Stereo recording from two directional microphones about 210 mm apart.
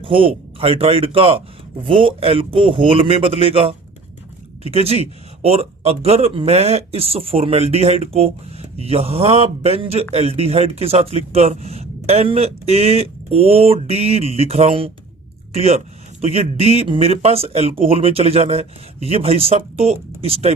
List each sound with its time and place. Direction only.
0.0 s a man's voice: 25° right (ahead or behind)